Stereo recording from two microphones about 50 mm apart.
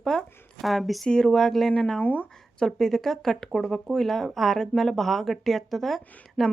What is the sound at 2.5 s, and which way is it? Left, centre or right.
Speech, centre.